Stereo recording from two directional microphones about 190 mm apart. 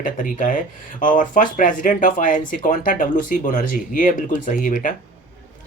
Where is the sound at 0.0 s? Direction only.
45° left (ahead or behind).